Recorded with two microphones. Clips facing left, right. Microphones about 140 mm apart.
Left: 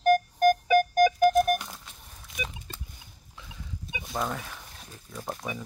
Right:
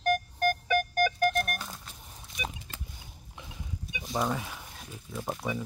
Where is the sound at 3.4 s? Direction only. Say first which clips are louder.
Right 1 dB; 20° right (ahead or behind).